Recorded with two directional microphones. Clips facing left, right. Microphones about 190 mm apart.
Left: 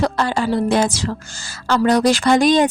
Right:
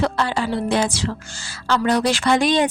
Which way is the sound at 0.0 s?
45° left (ahead or behind).